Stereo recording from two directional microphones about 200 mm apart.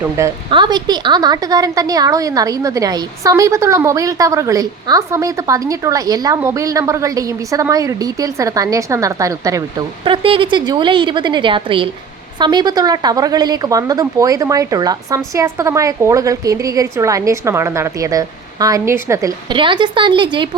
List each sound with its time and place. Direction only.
0.2 s a woman's voice: 15° right (ahead or behind)